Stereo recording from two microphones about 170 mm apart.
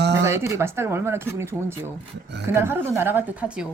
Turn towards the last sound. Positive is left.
turn(degrees=-5)  # may be behind; listen again after turning